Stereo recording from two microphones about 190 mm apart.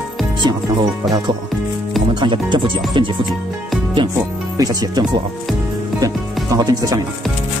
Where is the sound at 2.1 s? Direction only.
25° right (ahead or behind).